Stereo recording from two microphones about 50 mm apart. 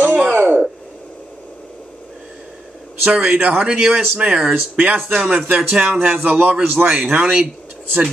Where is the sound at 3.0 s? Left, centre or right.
Right.